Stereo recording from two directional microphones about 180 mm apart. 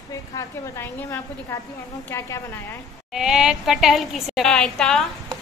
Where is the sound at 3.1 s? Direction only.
5° right (ahead or behind).